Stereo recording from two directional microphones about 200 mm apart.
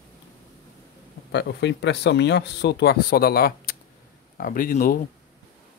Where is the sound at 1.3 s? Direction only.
60° left (ahead or behind).